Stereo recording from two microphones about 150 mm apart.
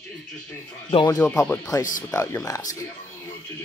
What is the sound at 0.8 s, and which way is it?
Speech, 25° left (ahead or behind).